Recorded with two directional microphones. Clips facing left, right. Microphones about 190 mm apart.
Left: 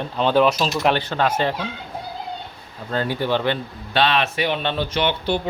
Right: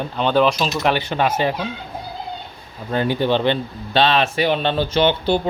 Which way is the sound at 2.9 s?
20° right (ahead or behind).